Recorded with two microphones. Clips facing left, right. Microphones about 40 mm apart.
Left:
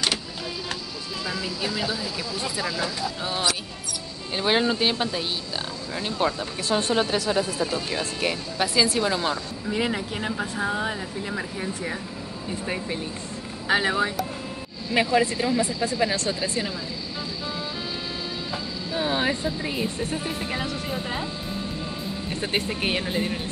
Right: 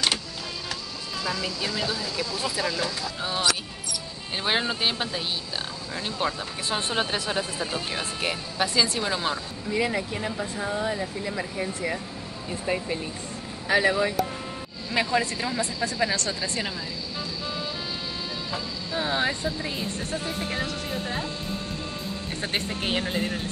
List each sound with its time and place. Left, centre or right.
1.2 s speech: centre
6.7 s speech: centre
8.2 s speech: centre
9.8 s speech: left
13.7 s speech: left
15.1 s speech: centre
15.6 s speech: left
18.9 s speech: centre
20.1 s speech: left
22.7 s speech: centre